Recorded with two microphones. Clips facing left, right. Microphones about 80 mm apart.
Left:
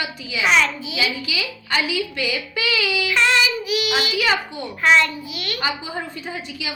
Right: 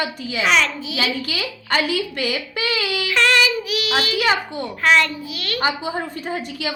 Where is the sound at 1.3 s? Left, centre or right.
Right.